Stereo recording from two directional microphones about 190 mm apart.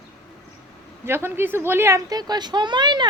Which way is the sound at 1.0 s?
10° right (ahead or behind).